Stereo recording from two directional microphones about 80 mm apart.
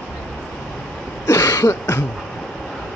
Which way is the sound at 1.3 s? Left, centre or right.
Left.